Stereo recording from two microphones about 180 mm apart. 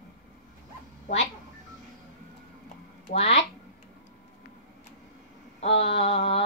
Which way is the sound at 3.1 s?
35° left (ahead or behind).